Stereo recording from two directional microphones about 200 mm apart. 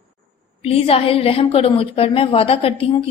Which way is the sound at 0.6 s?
30° left (ahead or behind).